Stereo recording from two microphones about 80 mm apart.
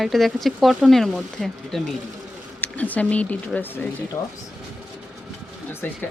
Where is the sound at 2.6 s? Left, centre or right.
Left.